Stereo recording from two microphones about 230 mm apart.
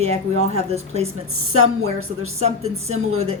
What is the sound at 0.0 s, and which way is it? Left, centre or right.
Speech, right.